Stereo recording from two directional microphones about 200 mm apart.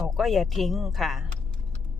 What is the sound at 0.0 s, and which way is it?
Speech, centre (ahead or behind).